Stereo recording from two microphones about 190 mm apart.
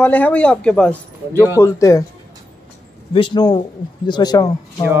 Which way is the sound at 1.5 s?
15° left (ahead or behind).